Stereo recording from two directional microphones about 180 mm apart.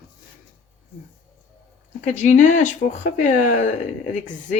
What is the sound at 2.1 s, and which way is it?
Speech, 45° left (ahead or behind).